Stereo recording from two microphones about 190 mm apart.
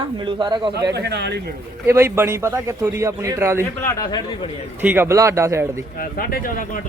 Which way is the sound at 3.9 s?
20° left (ahead or behind).